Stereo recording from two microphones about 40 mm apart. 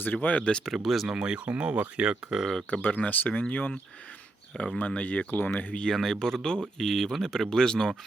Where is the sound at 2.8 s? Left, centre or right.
Left.